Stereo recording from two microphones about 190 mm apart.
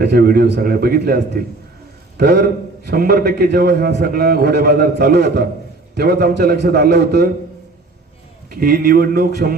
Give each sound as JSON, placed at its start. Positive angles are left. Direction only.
{"t": 0.0, "sound": "a man's voice", "side_deg": -55}
{"t": 8.4, "sound": "a man's voice", "side_deg": -50}